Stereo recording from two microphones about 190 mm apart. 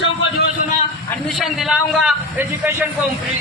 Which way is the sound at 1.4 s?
Centre (ahead or behind).